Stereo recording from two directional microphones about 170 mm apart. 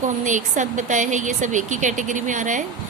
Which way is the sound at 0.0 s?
45° right (ahead or behind).